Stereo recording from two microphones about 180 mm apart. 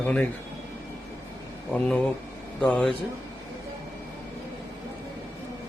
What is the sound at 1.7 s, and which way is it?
Speech, 5° left (ahead or behind).